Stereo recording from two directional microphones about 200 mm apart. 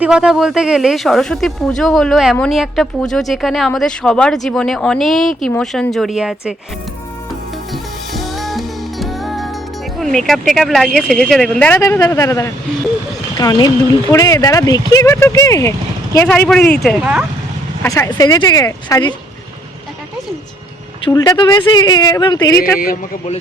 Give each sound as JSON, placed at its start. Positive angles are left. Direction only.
{"t": 0.0, "sound": "speech", "side_deg": -5}
{"t": 8.1, "sound": "music", "side_deg": 0}
{"t": 10.0, "sound": "speech", "side_deg": 0}
{"t": 17.8, "sound": "speech", "side_deg": 15}
{"t": 21.0, "sound": "a woman's voice", "side_deg": 20}
{"t": 22.8, "sound": "a man's voice", "side_deg": 45}